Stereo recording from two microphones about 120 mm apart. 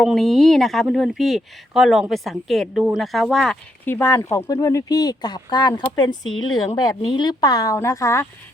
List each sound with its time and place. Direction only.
0.0 s a woman's voice: centre (ahead or behind)
3.8 s speech: 20° left (ahead or behind)